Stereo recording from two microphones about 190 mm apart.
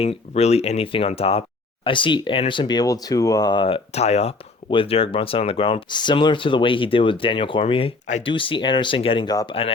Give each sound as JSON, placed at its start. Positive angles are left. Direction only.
{"t": 0.0, "sound": "speech", "side_deg": 30}